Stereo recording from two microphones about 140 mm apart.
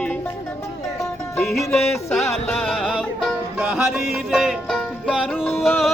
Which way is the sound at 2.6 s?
Centre (ahead or behind).